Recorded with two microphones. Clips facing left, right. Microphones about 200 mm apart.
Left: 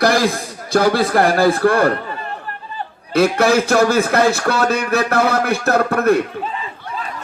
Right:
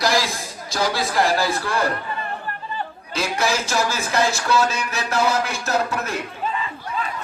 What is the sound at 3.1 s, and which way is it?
Speech, 60° left (ahead or behind).